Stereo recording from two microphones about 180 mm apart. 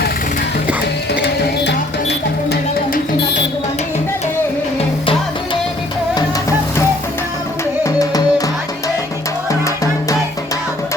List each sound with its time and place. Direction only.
1.2 s music: 70° left (ahead or behind)
7.9 s music: 20° left (ahead or behind)
9.5 s music: 20° left (ahead or behind)